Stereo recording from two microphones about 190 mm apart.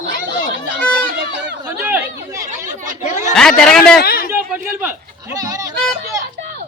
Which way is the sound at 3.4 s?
5° left (ahead or behind).